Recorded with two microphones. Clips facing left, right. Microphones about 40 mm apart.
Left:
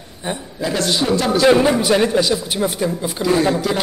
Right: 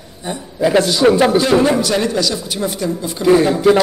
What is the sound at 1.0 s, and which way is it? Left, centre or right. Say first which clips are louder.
Speech: right 8 dB; right.